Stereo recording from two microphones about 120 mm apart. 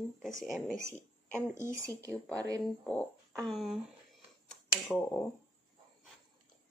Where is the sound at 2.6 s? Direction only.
10° left (ahead or behind).